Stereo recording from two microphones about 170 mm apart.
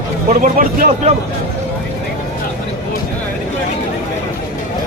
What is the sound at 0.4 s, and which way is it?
Speech, 50° right (ahead or behind).